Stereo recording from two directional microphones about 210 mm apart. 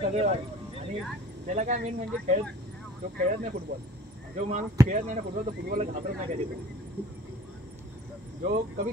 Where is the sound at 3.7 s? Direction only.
50° right (ahead or behind).